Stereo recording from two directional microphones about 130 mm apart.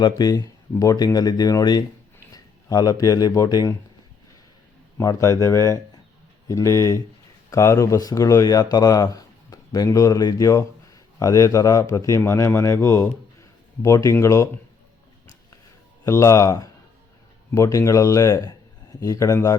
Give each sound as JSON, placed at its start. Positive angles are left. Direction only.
{"t": 0.2, "sound": "a man's voice", "side_deg": 30}
{"t": 4.9, "sound": "a man's voice", "side_deg": 25}
{"t": 16.0, "sound": "a man's voice", "side_deg": 25}